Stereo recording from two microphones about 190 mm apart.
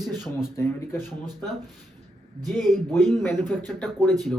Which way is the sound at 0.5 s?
10° left (ahead or behind).